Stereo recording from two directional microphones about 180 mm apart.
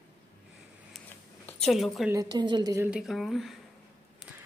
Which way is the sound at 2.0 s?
20° right (ahead or behind).